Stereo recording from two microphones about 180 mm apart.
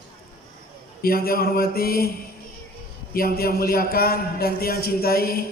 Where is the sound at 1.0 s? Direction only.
55° left (ahead or behind).